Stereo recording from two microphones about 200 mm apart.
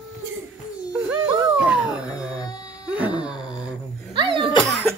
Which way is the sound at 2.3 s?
20° left (ahead or behind).